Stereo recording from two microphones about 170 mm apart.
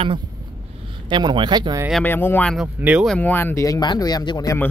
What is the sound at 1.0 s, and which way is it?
Speech, 25° right (ahead or behind).